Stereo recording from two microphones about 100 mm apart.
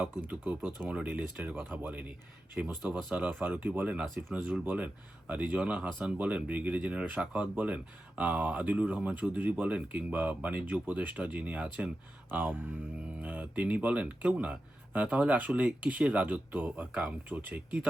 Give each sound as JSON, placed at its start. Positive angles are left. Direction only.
{"t": 0.3, "sound": "speech", "side_deg": -15}
{"t": 3.0, "sound": "speech", "side_deg": 0}
{"t": 3.2, "sound": "speech", "side_deg": -15}